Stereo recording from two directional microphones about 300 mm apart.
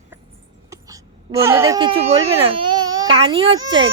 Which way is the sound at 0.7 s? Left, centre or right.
Centre.